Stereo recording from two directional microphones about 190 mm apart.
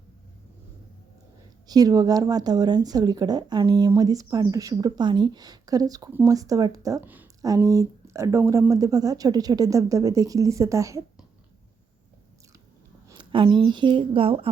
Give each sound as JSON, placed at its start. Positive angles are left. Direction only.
{"t": 1.6, "sound": "speech", "side_deg": -20}
{"t": 13.1, "sound": "speech", "side_deg": -25}